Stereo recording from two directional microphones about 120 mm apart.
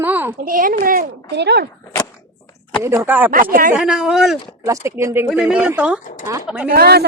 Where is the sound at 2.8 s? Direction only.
20° right (ahead or behind).